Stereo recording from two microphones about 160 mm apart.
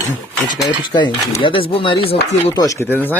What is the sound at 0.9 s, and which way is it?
Speech, 30° left (ahead or behind).